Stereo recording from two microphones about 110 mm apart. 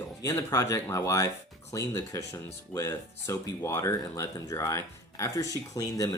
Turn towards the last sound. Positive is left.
turn(degrees=30)  # may be behind; listen again after turning